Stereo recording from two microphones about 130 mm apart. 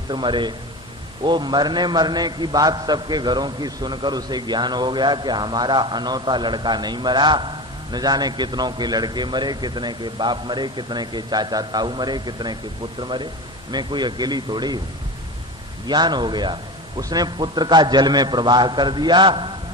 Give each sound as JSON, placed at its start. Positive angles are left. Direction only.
{"t": 0.1, "sound": "a man's voice", "side_deg": -35}
{"t": 15.9, "sound": "a man's voice", "side_deg": -35}